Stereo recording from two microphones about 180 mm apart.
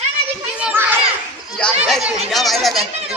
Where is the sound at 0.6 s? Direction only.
10° right (ahead or behind).